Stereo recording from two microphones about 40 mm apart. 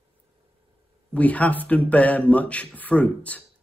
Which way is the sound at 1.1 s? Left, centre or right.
Left.